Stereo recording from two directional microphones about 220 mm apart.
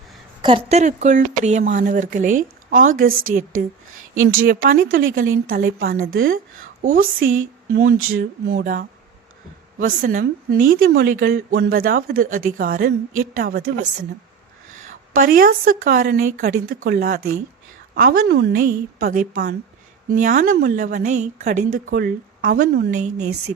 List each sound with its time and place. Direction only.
0.4 s a woman's voice: 25° right (ahead or behind)
3.1 s a woman's voice: 65° right (ahead or behind)
4.4 s a woman's voice: 40° right (ahead or behind)
7.9 s speech: 70° right (ahead or behind)
8.4 s a woman's voice: 40° right (ahead or behind)
14.8 s a woman's voice: 40° right (ahead or behind)